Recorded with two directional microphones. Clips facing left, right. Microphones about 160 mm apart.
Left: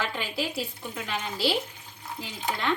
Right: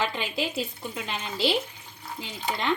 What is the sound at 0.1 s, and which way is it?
A woman's voice, 20° right (ahead or behind).